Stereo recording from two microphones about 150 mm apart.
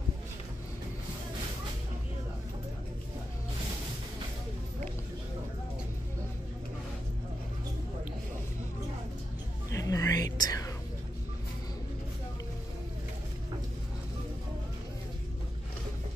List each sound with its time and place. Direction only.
9.7 s whispering: 20° left (ahead or behind)